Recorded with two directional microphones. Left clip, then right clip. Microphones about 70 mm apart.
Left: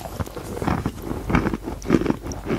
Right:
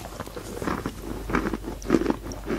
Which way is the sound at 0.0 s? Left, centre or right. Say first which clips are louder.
Left 4 dB; left.